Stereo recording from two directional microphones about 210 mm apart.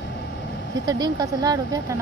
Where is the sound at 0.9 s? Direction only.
20° right (ahead or behind).